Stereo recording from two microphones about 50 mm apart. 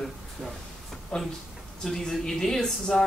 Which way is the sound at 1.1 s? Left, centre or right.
Centre.